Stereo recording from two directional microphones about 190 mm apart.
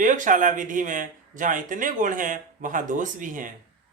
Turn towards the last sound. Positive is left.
turn(degrees=-45)  # may be behind; listen again after turning